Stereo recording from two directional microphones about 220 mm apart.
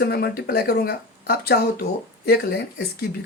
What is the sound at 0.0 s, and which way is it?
Speech, 45° left (ahead or behind).